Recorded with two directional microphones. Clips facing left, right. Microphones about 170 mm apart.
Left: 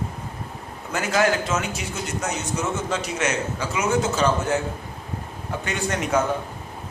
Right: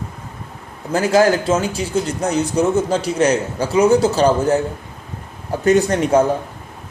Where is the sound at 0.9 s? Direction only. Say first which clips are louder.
Right 7 dB; 30° right (ahead or behind).